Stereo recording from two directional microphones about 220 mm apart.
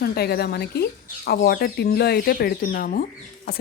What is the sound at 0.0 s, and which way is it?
Speech, 45° left (ahead or behind).